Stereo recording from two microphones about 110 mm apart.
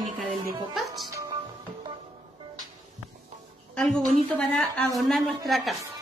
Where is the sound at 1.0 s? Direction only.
30° right (ahead or behind).